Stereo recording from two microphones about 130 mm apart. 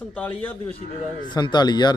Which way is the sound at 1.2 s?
35° left (ahead or behind).